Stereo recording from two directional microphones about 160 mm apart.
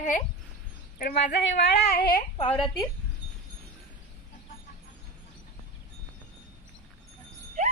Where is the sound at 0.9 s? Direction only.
75° left (ahead or behind).